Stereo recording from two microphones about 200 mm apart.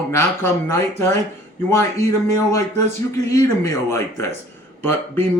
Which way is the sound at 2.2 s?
15° left (ahead or behind).